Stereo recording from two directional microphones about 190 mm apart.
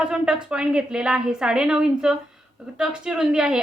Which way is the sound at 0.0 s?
5° right (ahead or behind).